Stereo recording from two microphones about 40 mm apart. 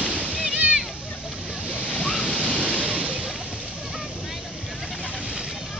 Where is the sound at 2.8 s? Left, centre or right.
Right.